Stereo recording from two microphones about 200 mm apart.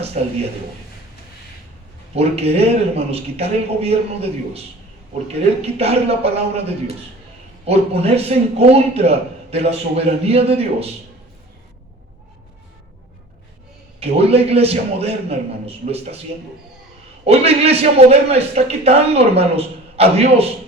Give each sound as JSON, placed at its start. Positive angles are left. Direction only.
{"t": 0.2, "sound": "a man's voice", "side_deg": -35}
{"t": 2.1, "sound": "a man's voice", "side_deg": -30}
{"t": 7.7, "sound": "a man's voice", "side_deg": -30}
{"t": 14.0, "sound": "a man's voice", "side_deg": -30}
{"t": 17.2, "sound": "a man's voice", "side_deg": -30}